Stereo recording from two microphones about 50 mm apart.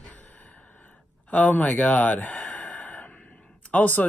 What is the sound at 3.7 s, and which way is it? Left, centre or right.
Speech, left.